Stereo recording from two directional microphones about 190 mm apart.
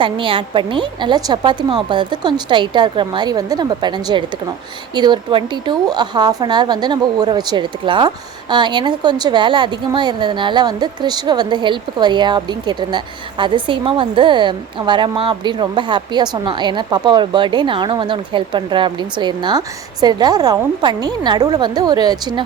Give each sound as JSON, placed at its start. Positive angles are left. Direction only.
{"t": 0.0, "sound": "speech", "side_deg": -25}